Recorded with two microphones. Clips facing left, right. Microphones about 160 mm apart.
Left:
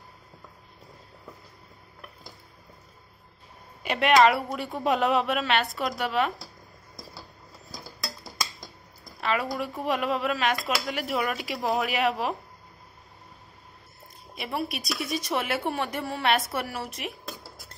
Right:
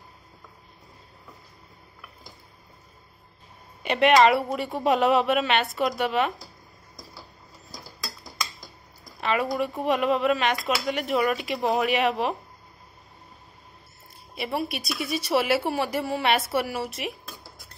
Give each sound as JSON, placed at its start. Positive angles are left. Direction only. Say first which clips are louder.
{"t": 3.8, "sound": "a woman's voice", "louder": "right 2 dB", "side_deg": 0}
{"t": 9.2, "sound": "speech", "louder": "right 3 dB", "side_deg": 0}
{"t": 14.3, "sound": "speech", "louder": "right 2 dB", "side_deg": 0}